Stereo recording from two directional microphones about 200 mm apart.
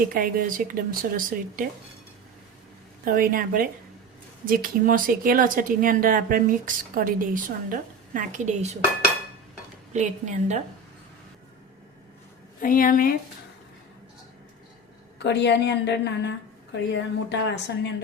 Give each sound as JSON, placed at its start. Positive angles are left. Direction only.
{"t": 0.1, "sound": "speech", "side_deg": -45}
{"t": 3.0, "sound": "speech", "side_deg": -45}
{"t": 9.9, "sound": "a woman's voice", "side_deg": -35}
{"t": 12.5, "sound": "a woman's voice", "side_deg": 45}
{"t": 15.2, "sound": "a woman's voice", "side_deg": 60}